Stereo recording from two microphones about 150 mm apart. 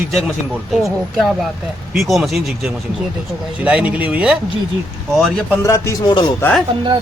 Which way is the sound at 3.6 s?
10° right (ahead or behind).